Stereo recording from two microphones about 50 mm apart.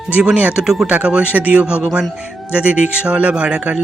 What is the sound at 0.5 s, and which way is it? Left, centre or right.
Speech, centre.